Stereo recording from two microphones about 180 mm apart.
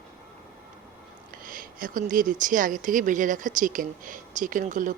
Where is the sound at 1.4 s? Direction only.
50° right (ahead or behind).